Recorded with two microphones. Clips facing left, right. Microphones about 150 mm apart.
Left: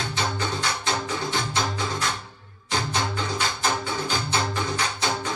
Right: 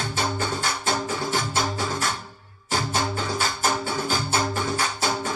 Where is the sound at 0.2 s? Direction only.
45° right (ahead or behind).